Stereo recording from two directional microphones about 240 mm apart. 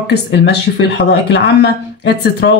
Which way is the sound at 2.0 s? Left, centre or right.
Left.